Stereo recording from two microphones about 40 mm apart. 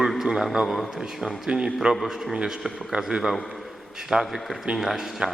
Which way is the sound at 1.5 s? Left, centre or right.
Centre.